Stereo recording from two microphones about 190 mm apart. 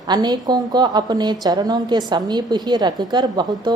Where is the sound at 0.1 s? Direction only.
20° right (ahead or behind).